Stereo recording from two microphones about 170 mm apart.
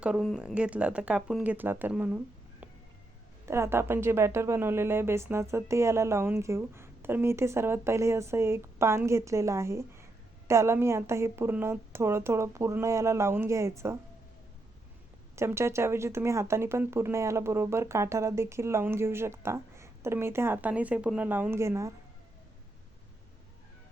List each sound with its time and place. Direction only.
0.0 s speech: centre (ahead or behind)
15.4 s speech: 15° right (ahead or behind)